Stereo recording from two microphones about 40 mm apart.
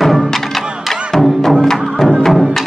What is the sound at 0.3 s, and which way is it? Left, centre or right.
Music, centre.